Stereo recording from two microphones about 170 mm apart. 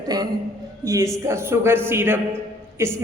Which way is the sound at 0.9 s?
20° right (ahead or behind).